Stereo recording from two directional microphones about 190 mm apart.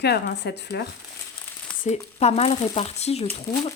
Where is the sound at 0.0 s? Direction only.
60° left (ahead or behind).